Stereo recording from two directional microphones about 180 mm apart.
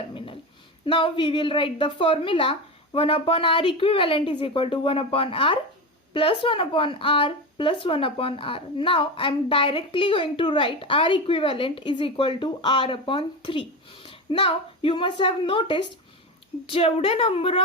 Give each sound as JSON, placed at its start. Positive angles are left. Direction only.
{"t": 0.9, "sound": "a woman's voice", "side_deg": 30}